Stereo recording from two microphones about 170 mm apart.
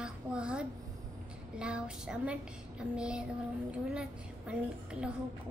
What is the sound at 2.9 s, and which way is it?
Child singing, 5° right (ahead or behind).